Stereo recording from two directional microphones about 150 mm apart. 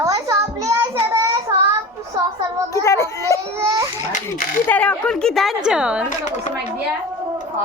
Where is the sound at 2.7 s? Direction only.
20° left (ahead or behind).